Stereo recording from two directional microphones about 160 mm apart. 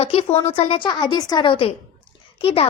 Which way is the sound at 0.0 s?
40° left (ahead or behind).